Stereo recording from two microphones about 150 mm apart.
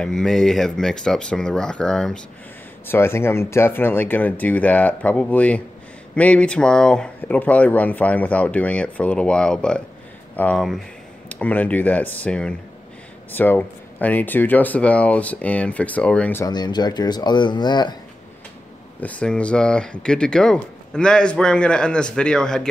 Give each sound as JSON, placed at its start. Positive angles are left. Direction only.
{"t": 0.0, "sound": "speech", "side_deg": 5}
{"t": 2.9, "sound": "speech", "side_deg": 15}
{"t": 16.4, "sound": "speech", "side_deg": 30}
{"t": 18.9, "sound": "speech", "side_deg": 10}